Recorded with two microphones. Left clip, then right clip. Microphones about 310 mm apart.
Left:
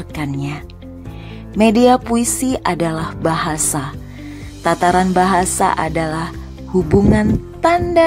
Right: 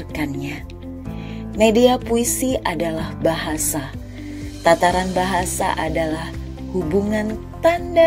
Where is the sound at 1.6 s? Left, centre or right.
Centre.